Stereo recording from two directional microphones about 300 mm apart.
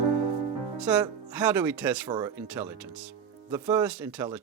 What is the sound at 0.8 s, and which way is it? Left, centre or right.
Speech, centre.